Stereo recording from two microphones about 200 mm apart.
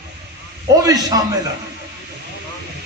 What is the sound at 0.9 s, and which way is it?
Speech, 20° right (ahead or behind).